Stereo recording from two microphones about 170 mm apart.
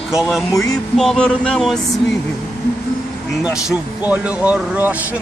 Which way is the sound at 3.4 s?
5° right (ahead or behind).